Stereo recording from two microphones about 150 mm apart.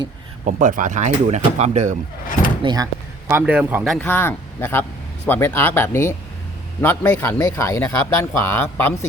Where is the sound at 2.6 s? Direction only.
30° right (ahead or behind).